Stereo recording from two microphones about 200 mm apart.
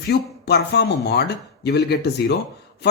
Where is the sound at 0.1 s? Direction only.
55° left (ahead or behind).